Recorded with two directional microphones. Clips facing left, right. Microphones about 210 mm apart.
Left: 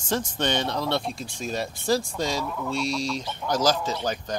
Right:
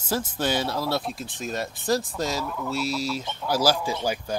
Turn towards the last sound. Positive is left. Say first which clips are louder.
# right 1 dB
turn(degrees=-10)  # may be behind; listen again after turning